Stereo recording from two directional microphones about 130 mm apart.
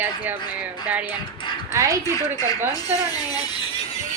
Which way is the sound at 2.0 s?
30° left (ahead or behind).